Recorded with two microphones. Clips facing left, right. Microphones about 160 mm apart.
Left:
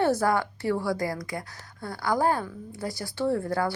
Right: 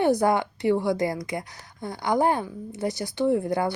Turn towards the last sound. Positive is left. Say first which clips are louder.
# right 3 dB
turn(degrees=-20)  # may be behind; listen again after turning